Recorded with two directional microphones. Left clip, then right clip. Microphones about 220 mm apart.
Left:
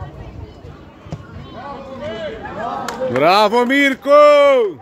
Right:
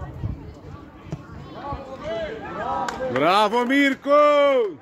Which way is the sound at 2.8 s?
15° left (ahead or behind).